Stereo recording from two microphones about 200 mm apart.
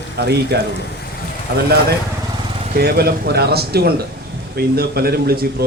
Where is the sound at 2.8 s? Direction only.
50° right (ahead or behind).